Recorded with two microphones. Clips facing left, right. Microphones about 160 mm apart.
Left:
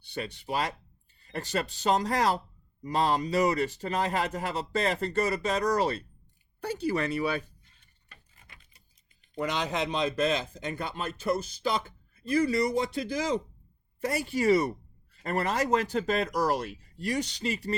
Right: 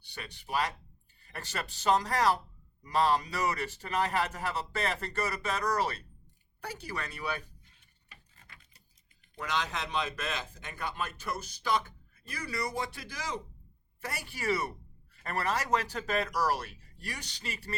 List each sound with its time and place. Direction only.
0.1 s speech: 25° left (ahead or behind)
9.4 s speech: 20° left (ahead or behind)